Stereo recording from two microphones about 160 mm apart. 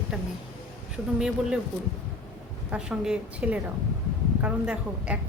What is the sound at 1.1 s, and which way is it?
Speech, 5° right (ahead or behind).